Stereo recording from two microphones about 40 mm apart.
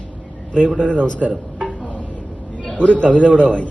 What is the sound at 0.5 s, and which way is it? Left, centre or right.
Speech, left.